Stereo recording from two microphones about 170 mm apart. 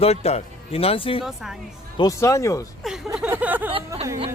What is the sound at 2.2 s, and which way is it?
Speech, 20° left (ahead or behind).